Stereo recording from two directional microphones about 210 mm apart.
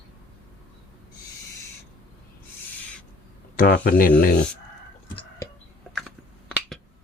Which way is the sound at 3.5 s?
40° left (ahead or behind).